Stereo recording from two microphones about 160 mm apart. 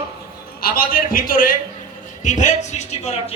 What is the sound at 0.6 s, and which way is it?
Speech, 65° left (ahead or behind).